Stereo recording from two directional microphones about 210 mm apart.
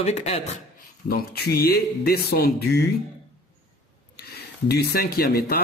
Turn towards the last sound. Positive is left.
turn(degrees=45)  # may be behind; listen again after turning